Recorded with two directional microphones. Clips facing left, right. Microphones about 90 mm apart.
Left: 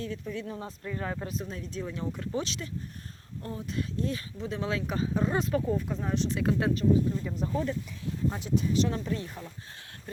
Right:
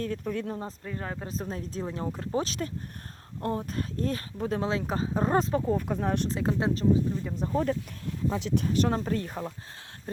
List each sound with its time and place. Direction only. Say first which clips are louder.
0.0 s speech: right 4 dB; 50° right (ahead or behind)
0.9 s speech: left 4 dB; 30° right (ahead or behind); by 4.6 s 45° right (ahead or behind)
4.6 s speech: right 2 dB; 35° right (ahead or behind)
5.5 s speech: right 1 dB; 30° right (ahead or behind)
5.7 s speech: right 3 dB; 60° right (ahead or behind)
6.2 s speech: even; 30° right (ahead or behind)
7.3 s speech: even; 40° right (ahead or behind)
7.5 s speech: right 6 dB; 50° right (ahead or behind)
8.4 s speech: right 1 dB; 70° right (ahead or behind); by 9.5 s 55° right (ahead or behind)